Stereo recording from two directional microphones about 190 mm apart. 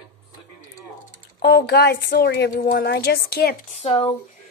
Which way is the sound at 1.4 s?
60° left (ahead or behind).